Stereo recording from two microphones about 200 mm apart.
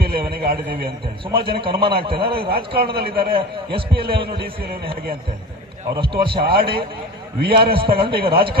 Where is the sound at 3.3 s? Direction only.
25° right (ahead or behind).